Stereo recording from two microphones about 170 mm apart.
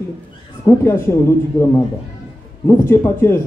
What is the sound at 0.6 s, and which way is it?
Speech, 15° left (ahead or behind).